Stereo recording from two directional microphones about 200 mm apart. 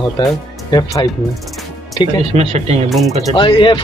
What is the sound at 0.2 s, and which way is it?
Speech, 20° left (ahead or behind).